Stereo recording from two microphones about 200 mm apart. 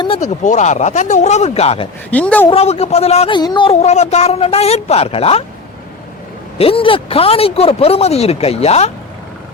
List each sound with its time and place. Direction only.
0.0 s speech: 30° left (ahead or behind)
2.0 s a woman's voice: 5° left (ahead or behind)
2.5 s speech: 30° left (ahead or behind)
3.8 s speech: 35° left (ahead or behind)
6.6 s speech: 30° left (ahead or behind)